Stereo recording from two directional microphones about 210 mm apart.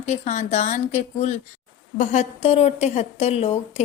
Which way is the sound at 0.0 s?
35° left (ahead or behind).